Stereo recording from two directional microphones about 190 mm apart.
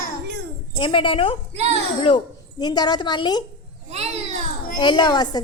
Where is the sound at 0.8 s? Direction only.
30° left (ahead or behind).